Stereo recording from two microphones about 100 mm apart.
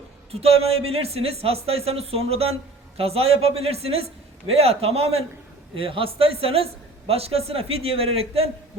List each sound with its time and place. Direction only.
0.3 s speech: 90° right
5.7 s a man's voice: 65° right (ahead or behind)
7.1 s a man's voice: 90° right; by 8.4 s 75° right (ahead or behind)